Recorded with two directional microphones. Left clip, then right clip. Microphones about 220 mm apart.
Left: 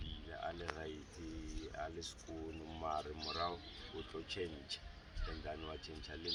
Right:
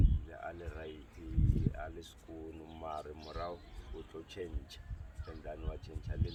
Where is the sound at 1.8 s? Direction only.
10° left (ahead or behind).